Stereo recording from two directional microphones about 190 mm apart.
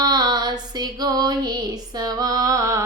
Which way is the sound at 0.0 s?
20° right (ahead or behind).